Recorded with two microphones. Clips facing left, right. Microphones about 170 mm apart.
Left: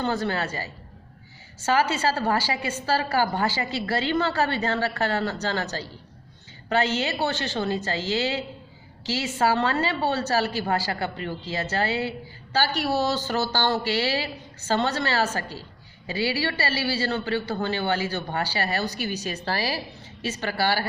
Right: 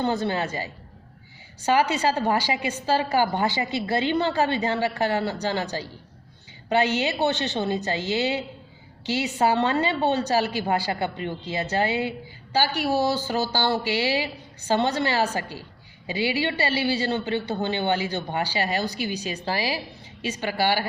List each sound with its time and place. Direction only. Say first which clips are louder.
0.0 s a woman's voice: right 1 dB; 20° right (ahead or behind)